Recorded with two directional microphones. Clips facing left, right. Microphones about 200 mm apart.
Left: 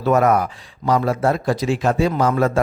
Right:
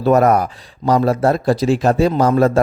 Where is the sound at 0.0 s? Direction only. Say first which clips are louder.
Right 3 dB; 35° right (ahead or behind).